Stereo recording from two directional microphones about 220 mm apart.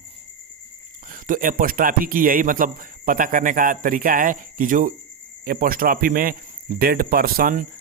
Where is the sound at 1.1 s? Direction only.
40° right (ahead or behind).